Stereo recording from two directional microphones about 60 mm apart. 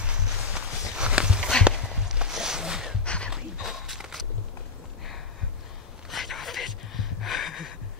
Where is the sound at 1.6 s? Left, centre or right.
Centre.